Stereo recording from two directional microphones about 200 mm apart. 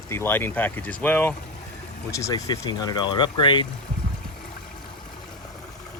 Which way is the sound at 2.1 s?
15° left (ahead or behind).